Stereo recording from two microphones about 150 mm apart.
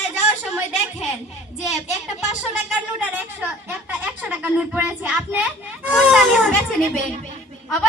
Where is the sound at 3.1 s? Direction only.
15° right (ahead or behind).